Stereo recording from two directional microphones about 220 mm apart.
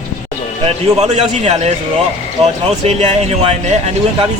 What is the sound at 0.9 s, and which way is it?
Speech, 30° right (ahead or behind).